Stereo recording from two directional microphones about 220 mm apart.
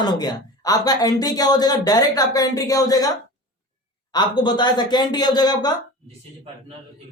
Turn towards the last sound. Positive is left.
turn(degrees=20)  # may be behind; listen again after turning